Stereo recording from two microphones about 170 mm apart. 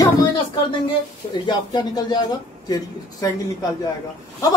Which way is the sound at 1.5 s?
25° left (ahead or behind).